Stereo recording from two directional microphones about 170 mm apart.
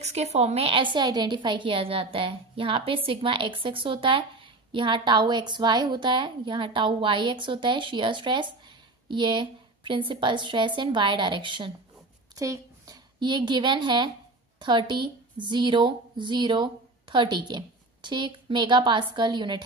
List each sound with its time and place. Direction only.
0.0 s a woman's voice: 40° right (ahead or behind)